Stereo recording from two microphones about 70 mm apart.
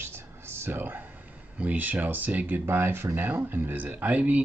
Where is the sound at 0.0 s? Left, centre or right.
Right.